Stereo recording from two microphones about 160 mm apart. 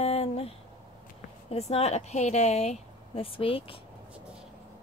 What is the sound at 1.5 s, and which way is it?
Speech, 40° left (ahead or behind).